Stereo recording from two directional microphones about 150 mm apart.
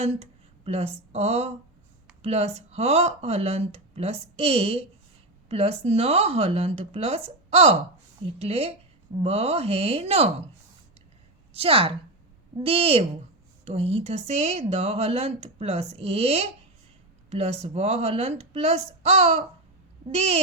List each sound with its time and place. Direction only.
0.0 s speech: 45° right (ahead or behind)
11.5 s a woman's voice: 40° right (ahead or behind)